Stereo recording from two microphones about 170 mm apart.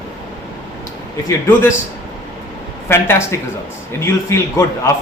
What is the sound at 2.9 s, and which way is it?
Speech, 15° left (ahead or behind).